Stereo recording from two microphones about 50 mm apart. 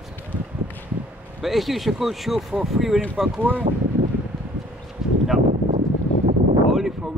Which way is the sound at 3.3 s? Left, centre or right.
Right.